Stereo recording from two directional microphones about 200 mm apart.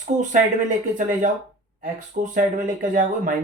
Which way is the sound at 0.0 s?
40° right (ahead or behind).